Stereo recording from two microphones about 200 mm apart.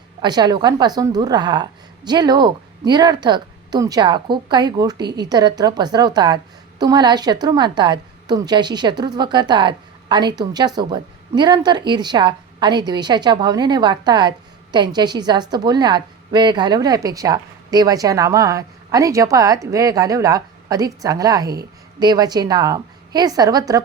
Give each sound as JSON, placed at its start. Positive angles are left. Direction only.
{"t": 0.2, "sound": "a woman's voice", "side_deg": -20}